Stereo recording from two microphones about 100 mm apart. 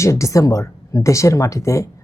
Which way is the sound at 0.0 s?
30° left (ahead or behind).